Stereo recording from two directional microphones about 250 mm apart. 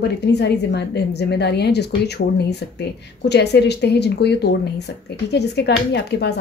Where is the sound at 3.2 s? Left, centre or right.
Left.